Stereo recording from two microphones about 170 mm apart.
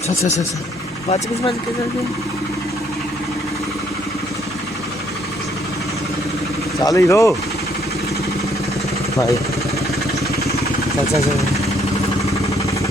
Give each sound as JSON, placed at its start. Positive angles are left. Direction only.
{"t": 6.8, "sound": "speech", "side_deg": 20}